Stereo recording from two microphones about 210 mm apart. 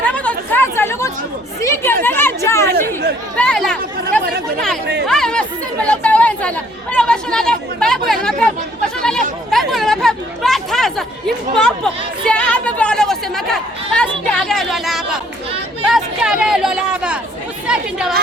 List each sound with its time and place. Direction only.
0.0 s chatter: 5° left (ahead or behind)
2.6 s chatter: 50° right (ahead or behind)
3.3 s chatter: 5° left (ahead or behind)
5.9 s a sound: 5° left (ahead or behind)
6.9 s chatter: 5° left (ahead or behind)
15.9 s a sound: 5° right (ahead or behind)